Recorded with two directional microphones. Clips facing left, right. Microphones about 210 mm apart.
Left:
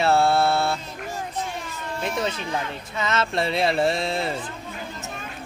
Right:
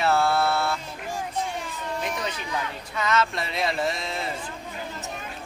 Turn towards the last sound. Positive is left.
turn(degrees=30)  # may be behind; listen again after turning